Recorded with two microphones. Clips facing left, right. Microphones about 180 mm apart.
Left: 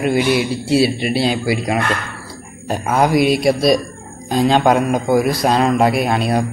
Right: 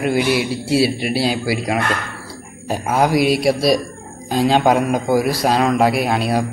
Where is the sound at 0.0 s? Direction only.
5° right (ahead or behind).